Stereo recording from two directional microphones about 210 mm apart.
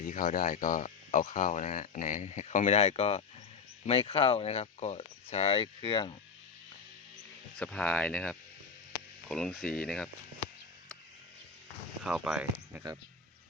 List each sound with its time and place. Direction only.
0.0 s speech: 40° left (ahead or behind); by 6.1 s 25° left (ahead or behind)
7.6 s speech: 5° left (ahead or behind)
12.0 s speech: centre (ahead or behind)